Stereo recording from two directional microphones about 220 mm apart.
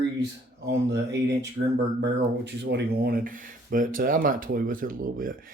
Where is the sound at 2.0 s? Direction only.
50° right (ahead or behind).